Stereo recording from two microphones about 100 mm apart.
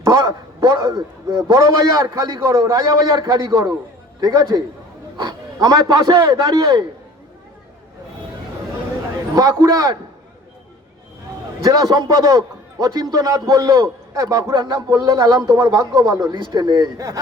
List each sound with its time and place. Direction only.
0.0 s speech: 45° right (ahead or behind)
9.3 s speech: 40° right (ahead or behind)
11.6 s speech: 40° right (ahead or behind)